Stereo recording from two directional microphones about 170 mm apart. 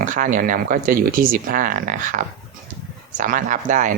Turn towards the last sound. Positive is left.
turn(degrees=-50)  # may be behind; listen again after turning